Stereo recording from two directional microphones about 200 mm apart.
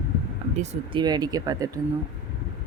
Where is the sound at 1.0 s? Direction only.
20° right (ahead or behind).